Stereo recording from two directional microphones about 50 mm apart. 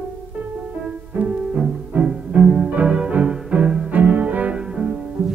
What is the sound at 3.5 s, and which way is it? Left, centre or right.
Music, right.